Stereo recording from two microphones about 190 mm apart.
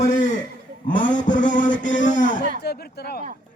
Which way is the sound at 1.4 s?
40° left (ahead or behind).